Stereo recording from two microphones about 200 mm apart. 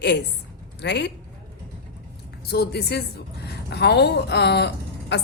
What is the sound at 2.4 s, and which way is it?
A woman's voice, 50° left (ahead or behind).